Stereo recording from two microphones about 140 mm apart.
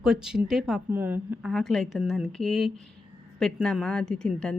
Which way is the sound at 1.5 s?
5° left (ahead or behind).